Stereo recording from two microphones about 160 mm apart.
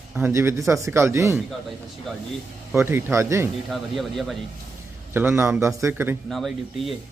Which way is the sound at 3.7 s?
Centre (ahead or behind).